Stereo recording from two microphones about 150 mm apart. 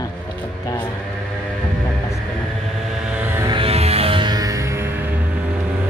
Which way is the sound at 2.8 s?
5° right (ahead or behind).